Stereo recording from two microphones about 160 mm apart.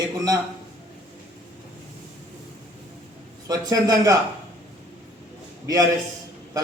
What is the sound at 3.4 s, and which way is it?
Speech, 20° right (ahead or behind).